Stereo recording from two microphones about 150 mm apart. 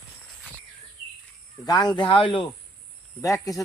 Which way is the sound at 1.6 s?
25° left (ahead or behind).